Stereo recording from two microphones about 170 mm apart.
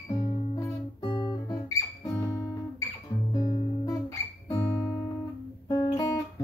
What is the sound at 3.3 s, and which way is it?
Guitar, 25° left (ahead or behind).